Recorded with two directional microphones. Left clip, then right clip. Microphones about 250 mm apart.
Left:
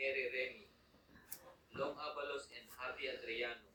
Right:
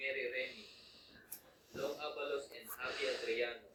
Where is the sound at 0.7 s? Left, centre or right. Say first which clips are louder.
Right 11 dB; right.